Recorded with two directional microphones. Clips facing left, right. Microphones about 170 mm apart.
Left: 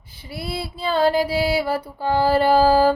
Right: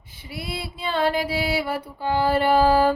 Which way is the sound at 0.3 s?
35° left (ahead or behind).